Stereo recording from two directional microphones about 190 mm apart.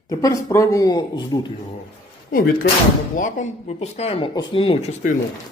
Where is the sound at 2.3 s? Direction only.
50° left (ahead or behind); by 4.9 s 30° left (ahead or behind).